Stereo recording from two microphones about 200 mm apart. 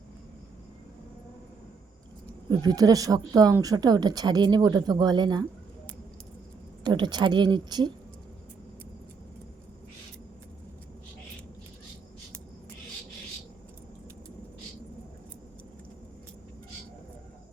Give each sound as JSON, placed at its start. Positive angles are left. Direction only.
{"t": 2.5, "sound": "speech", "side_deg": -20}
{"t": 6.8, "sound": "speech", "side_deg": -20}